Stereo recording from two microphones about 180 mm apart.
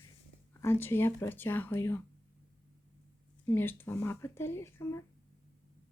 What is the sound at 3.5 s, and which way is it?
Speech, 10° left (ahead or behind).